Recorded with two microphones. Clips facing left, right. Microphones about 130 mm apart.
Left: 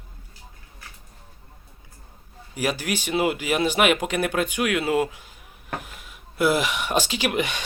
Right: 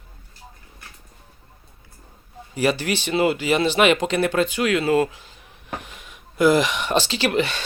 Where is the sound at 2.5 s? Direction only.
10° left (ahead or behind).